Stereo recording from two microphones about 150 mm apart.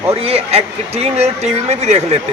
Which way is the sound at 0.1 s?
40° right (ahead or behind).